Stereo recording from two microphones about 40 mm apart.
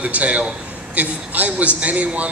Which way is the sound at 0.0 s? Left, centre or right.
Right.